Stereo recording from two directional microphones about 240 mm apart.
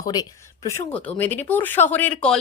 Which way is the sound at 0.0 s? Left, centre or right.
Centre.